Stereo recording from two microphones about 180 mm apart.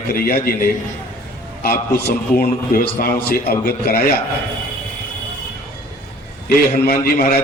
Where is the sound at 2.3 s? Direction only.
55° left (ahead or behind).